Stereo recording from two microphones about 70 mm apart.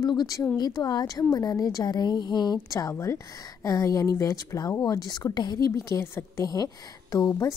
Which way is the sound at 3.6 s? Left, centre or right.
Left.